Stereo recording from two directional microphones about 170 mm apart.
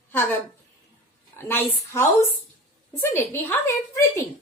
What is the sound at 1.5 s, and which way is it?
Speech, 15° left (ahead or behind).